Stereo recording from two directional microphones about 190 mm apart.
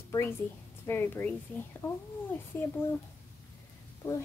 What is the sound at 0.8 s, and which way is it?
Speech, 10° left (ahead or behind).